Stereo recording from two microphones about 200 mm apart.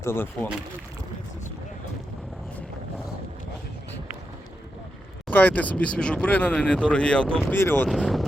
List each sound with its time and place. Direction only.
0.0 s speech: 10° left (ahead or behind)
5.3 s speech: 5° left (ahead or behind)
7.9 s speech: centre (ahead or behind)